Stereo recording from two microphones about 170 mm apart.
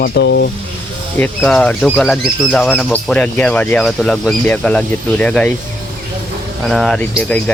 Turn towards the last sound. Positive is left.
turn(degrees=10)  # may be behind; listen again after turning